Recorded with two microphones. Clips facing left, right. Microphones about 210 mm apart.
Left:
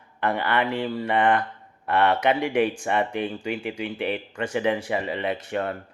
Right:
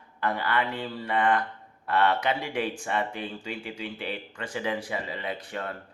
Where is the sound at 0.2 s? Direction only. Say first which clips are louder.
Left 4 dB; 75° left (ahead or behind).